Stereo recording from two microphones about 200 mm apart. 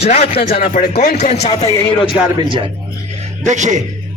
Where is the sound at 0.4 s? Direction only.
45° left (ahead or behind).